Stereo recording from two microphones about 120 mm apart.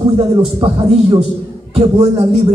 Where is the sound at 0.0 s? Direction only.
50° right (ahead or behind).